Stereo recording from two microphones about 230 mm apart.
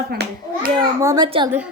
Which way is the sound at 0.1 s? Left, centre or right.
Right.